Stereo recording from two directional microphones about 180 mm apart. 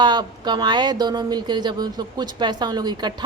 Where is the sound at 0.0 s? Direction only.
25° right (ahead or behind).